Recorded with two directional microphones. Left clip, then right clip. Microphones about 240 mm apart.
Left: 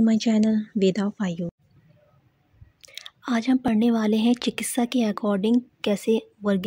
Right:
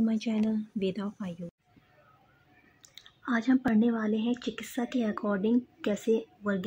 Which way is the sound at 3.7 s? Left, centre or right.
Left.